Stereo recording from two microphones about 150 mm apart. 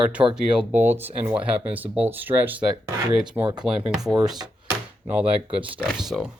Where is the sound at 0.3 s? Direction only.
5° right (ahead or behind).